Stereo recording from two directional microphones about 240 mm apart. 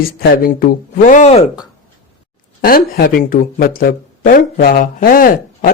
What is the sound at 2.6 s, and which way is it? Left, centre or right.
Speech, left.